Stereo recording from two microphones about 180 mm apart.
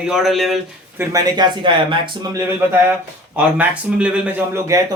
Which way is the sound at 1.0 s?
20° right (ahead or behind).